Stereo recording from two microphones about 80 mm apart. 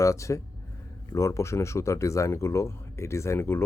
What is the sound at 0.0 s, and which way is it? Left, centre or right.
Speech, left.